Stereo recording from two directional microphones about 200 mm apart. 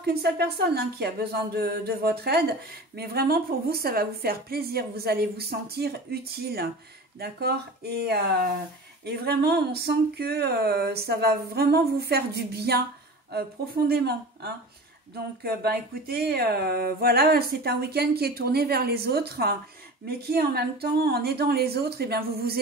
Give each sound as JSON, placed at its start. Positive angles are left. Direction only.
{"t": 0.0, "sound": "a woman's voice", "side_deg": -55}